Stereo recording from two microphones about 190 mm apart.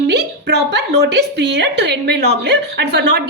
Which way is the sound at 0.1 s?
60° right (ahead or behind).